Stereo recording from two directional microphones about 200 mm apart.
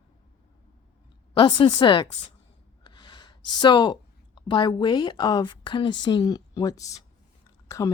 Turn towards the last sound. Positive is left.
turn(degrees=15)  # may be behind; listen again after turning